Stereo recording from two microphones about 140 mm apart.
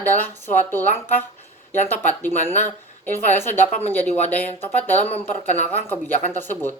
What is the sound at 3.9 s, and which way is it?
A woman's voice, 15° left (ahead or behind).